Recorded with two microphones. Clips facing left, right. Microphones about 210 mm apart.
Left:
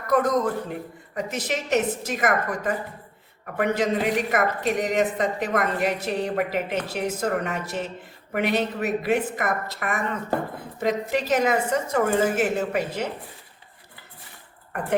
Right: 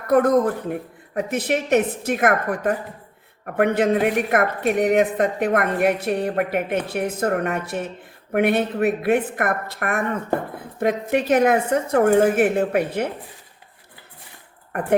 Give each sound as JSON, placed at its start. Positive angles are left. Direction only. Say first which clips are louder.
{"t": 0.1, "sound": "a woman's voice", "louder": "right 5 dB", "side_deg": -55}